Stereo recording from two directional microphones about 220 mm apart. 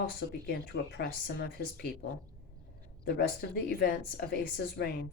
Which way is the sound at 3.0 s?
45° left (ahead or behind).